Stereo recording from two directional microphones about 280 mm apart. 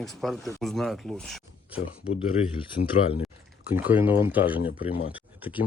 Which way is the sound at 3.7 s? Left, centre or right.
Centre.